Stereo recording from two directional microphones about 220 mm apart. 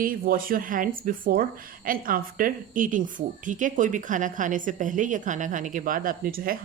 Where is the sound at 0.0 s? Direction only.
40° right (ahead or behind).